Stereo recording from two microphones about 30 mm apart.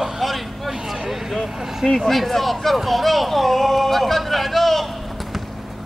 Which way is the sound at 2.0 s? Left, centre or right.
Centre.